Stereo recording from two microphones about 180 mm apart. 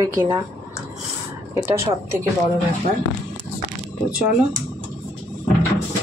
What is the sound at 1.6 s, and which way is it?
Speech, 15° right (ahead or behind).